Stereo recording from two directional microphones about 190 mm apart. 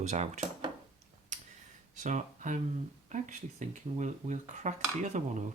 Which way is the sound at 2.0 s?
40° right (ahead or behind).